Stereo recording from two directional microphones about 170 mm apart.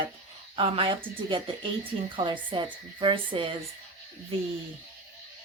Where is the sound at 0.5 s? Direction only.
35° right (ahead or behind).